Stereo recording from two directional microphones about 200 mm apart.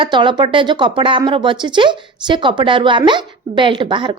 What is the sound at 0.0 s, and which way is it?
A woman's voice, 25° right (ahead or behind).